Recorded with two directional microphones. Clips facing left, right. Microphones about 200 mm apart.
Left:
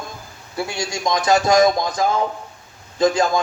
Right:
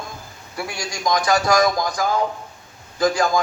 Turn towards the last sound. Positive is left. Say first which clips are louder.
# left 2 dB
turn(degrees=25)  # may be behind; listen again after turning